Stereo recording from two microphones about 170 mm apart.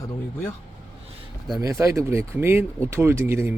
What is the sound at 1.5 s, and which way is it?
A man's voice, 20° right (ahead or behind).